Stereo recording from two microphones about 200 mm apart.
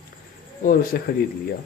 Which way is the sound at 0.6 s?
45° left (ahead or behind).